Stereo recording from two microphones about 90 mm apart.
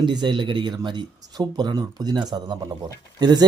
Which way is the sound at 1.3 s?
50° right (ahead or behind).